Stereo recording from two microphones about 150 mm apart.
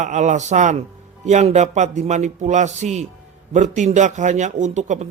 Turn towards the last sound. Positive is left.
turn(degrees=-50)  # may be behind; listen again after turning